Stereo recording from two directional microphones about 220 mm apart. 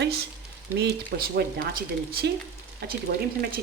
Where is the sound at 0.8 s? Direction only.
45° right (ahead or behind).